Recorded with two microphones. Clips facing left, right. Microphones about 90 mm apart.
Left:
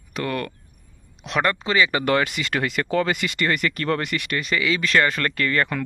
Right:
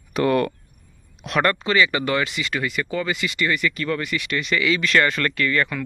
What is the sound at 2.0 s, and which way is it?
Speech, 55° left (ahead or behind).